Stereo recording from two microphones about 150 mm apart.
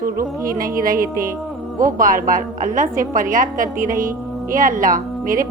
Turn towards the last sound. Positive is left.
turn(degrees=-65)  # may be behind; listen again after turning